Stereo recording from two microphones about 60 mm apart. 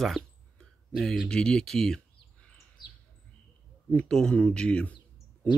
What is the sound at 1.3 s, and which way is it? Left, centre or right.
Speech, centre.